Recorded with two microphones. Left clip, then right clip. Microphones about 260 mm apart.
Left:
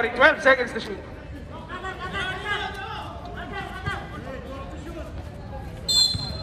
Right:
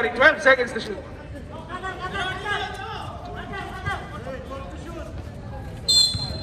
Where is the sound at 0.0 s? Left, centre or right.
Left.